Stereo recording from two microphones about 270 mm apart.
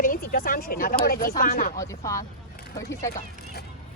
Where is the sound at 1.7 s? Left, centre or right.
Centre.